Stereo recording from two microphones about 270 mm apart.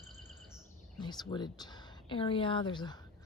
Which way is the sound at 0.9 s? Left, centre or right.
Centre.